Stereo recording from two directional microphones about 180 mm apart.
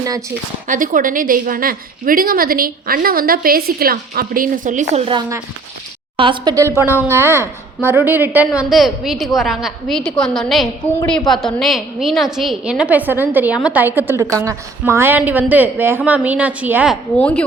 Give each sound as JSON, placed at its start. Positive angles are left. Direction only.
{"t": 0.7, "sound": "a woman's voice", "side_deg": -45}
{"t": 6.1, "sound": "a woman's voice", "side_deg": -25}
{"t": 17.2, "sound": "a woman's voice", "side_deg": 5}